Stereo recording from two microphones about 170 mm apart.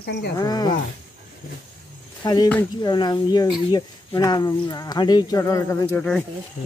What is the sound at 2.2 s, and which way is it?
Speech, 25° left (ahead or behind).